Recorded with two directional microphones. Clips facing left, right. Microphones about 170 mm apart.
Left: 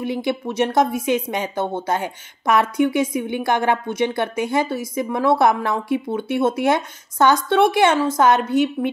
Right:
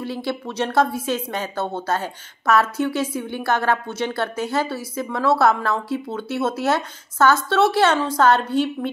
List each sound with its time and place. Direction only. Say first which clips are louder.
0.0 s a woman's voice: left 4 dB; 15° left (ahead or behind)